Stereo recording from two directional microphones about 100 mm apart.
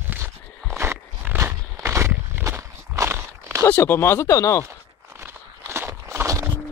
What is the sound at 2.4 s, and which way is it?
Walk, 30° right (ahead or behind).